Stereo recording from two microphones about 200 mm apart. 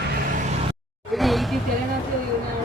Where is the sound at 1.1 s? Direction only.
Centre (ahead or behind).